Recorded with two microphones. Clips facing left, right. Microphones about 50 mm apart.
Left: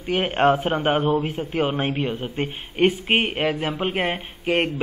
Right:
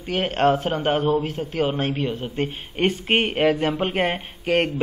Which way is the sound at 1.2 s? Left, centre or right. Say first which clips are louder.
Even; centre.